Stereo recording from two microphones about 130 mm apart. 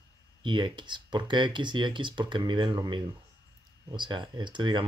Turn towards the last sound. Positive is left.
turn(degrees=-35)  # may be behind; listen again after turning